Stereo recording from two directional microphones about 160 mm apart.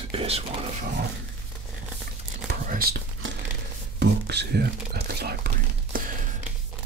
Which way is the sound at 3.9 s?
90° right.